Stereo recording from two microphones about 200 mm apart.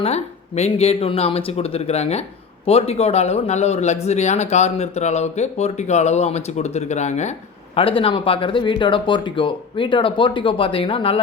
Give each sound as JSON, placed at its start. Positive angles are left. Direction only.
{"t": 0.0, "sound": "a man's voice", "side_deg": 30}